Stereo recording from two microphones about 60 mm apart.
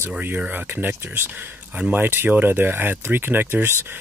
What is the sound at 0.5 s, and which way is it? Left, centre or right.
Speech, right.